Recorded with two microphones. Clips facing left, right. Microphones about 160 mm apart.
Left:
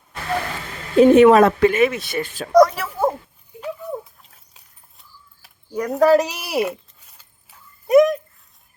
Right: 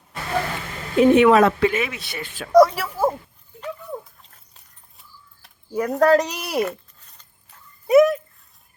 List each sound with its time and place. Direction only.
0.9 s speech: 40° left (ahead or behind)
2.5 s a woman's voice: 5° right (ahead or behind)
3.5 s dog: 10° left (ahead or behind)
4.2 s a sound: 5° left (ahead or behind)
5.7 s zipper: centre (ahead or behind)